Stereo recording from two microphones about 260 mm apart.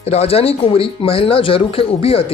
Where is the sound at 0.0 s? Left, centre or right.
Left.